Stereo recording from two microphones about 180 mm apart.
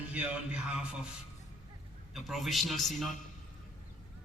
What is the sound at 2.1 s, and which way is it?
A man's voice, centre (ahead or behind).